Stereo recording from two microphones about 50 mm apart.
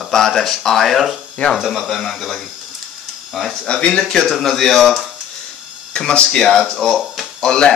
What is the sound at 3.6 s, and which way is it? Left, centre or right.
Speech, centre.